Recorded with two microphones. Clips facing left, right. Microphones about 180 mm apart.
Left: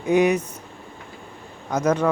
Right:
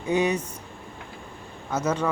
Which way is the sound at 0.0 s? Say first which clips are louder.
Left 5 dB; 10° left (ahead or behind).